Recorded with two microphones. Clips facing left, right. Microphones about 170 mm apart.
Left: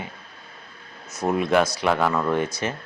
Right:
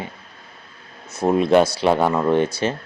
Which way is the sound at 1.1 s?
30° right (ahead or behind).